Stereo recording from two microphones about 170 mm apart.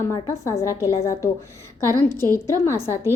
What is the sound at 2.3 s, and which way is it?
Speech, 15° left (ahead or behind).